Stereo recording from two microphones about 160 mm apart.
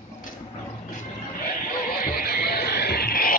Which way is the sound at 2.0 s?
70° left (ahead or behind).